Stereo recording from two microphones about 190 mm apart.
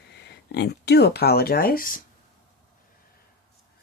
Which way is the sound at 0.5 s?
60° left (ahead or behind).